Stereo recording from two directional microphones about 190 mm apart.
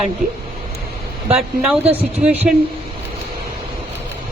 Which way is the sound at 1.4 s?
Centre (ahead or behind).